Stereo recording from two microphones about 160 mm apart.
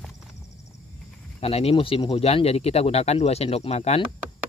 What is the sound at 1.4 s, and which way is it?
Speech, 40° left (ahead or behind).